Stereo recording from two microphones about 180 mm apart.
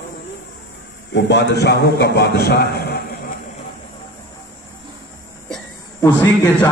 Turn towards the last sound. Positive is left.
turn(degrees=10)  # may be behind; listen again after turning